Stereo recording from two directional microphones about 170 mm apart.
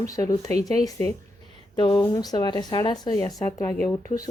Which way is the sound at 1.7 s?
30° left (ahead or behind).